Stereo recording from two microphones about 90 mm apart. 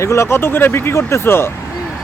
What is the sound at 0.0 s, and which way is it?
Speech, 30° left (ahead or behind).